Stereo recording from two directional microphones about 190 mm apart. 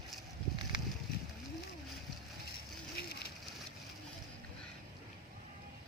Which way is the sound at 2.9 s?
55° left (ahead or behind).